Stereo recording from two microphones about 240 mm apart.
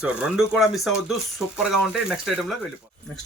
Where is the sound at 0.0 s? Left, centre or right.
Centre.